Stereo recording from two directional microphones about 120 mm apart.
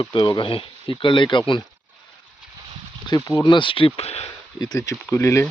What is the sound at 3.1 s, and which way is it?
Speech, 30° left (ahead or behind).